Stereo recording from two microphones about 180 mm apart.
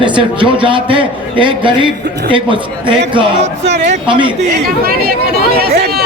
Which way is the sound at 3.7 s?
40° right (ahead or behind).